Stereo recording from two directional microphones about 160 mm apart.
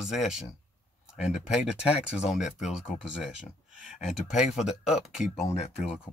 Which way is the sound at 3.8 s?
5° right (ahead or behind).